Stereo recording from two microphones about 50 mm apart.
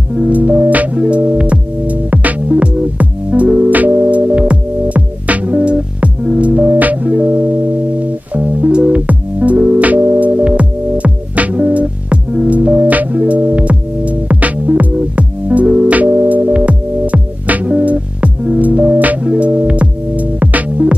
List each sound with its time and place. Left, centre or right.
0.1 s music: right